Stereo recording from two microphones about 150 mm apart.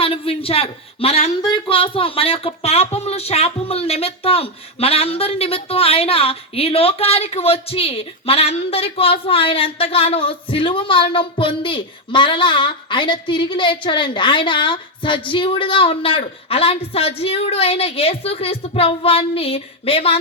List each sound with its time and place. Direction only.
0.0 s speech: 40° left (ahead or behind)